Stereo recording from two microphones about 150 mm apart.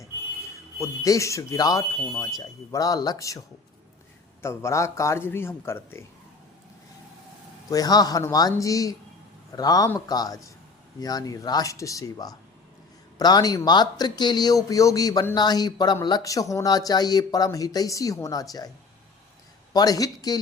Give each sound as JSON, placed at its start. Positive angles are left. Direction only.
{"t": 0.8, "sound": "speech", "side_deg": 20}
{"t": 4.4, "sound": "a man's voice", "side_deg": 20}
{"t": 7.7, "sound": "speech", "side_deg": 25}
{"t": 19.7, "sound": "speech", "side_deg": 25}